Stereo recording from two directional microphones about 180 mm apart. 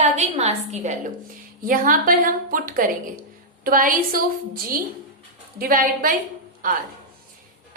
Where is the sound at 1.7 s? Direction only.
50° right (ahead or behind).